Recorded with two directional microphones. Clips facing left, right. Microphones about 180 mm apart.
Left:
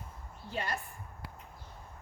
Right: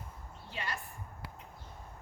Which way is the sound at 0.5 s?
40° left (ahead or behind).